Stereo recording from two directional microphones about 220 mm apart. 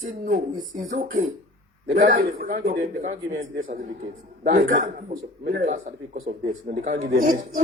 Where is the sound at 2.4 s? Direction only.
40° right (ahead or behind).